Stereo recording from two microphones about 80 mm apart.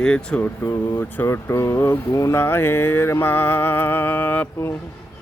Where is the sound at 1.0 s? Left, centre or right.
Left.